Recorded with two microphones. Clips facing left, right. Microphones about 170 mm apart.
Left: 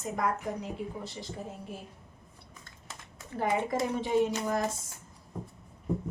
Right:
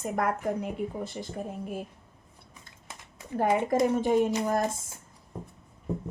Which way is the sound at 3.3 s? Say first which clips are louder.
Right 5 dB; 50° right (ahead or behind).